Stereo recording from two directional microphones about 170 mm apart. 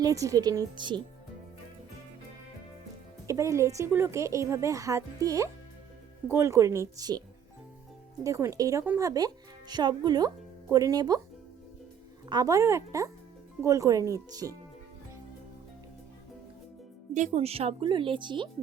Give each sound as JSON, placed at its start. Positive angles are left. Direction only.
{"t": 0.0, "sound": "speech", "side_deg": -20}
{"t": 3.2, "sound": "a woman's voice", "side_deg": -20}
{"t": 8.2, "sound": "speech", "side_deg": -20}
{"t": 12.3, "sound": "speech", "side_deg": -20}
{"t": 17.2, "sound": "speech", "side_deg": -40}